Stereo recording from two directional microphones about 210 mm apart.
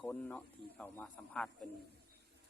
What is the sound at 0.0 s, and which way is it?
Speech, 5° left (ahead or behind).